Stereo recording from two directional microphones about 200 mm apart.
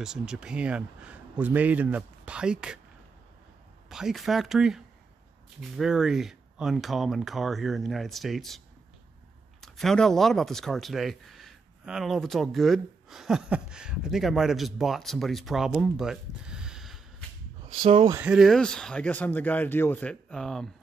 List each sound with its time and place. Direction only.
0.0 s speech: 5° right (ahead or behind)
3.9 s speech: centre (ahead or behind)
17.8 s speech: 25° right (ahead or behind)
18.1 s speech: 5° right (ahead or behind)